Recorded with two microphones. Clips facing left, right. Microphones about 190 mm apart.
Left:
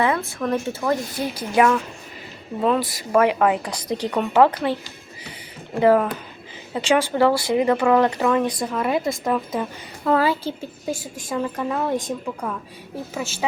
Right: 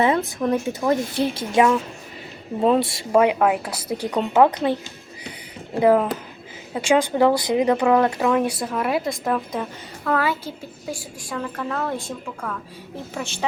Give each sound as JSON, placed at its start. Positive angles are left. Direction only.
{"t": 0.0, "sound": "speech", "side_deg": -20}
{"t": 1.1, "sound": "speech", "side_deg": -25}
{"t": 3.3, "sound": "speech", "side_deg": -5}
{"t": 6.7, "sound": "speech", "side_deg": -15}
{"t": 10.0, "sound": "a woman's voice", "side_deg": 25}
{"t": 11.2, "sound": "a woman's voice", "side_deg": 20}
{"t": 13.1, "sound": "a woman's voice", "side_deg": 5}